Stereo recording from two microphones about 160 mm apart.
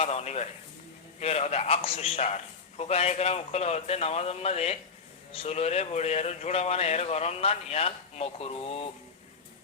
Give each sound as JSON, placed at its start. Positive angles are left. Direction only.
{"t": 0.0, "sound": "a man's voice", "side_deg": 40}